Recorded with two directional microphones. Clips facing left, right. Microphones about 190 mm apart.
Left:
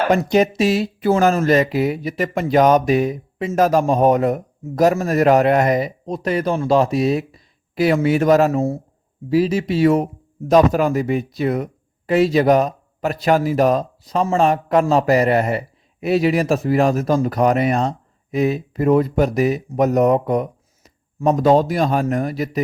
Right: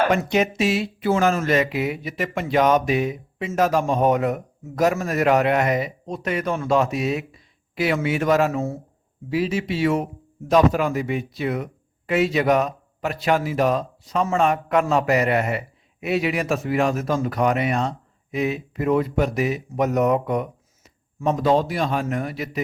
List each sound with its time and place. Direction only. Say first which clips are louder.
0.1 s speech: left 5 dB; 35° left (ahead or behind)